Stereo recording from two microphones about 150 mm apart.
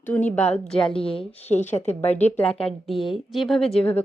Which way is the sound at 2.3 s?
10° left (ahead or behind).